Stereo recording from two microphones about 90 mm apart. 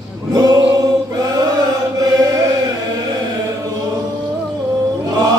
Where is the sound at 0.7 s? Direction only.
40° right (ahead or behind).